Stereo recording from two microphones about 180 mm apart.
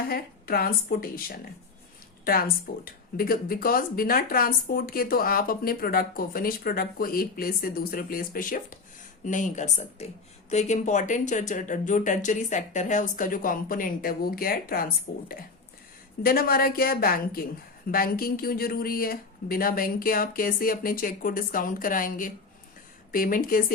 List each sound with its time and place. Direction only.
0.1 s a woman's voice: 55° left (ahead or behind)